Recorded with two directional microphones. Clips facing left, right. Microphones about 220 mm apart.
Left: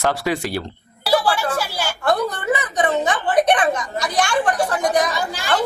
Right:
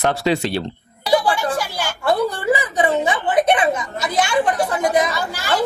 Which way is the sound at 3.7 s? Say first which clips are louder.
Right 1 dB; 5° right (ahead or behind).